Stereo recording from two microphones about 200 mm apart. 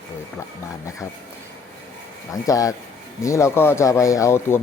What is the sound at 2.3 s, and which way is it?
Speech, 15° left (ahead or behind).